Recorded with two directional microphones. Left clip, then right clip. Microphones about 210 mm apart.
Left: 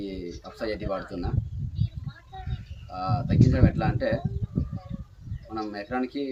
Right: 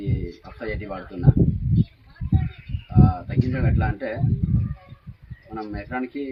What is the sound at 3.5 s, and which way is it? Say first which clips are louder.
Speech: left 1 dB; 15° left (ahead or behind).